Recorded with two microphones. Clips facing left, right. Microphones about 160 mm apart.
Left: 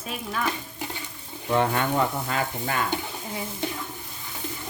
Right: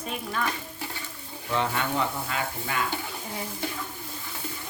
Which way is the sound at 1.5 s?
50° left (ahead or behind).